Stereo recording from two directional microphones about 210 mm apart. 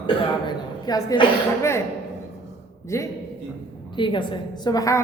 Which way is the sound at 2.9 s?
15° left (ahead or behind).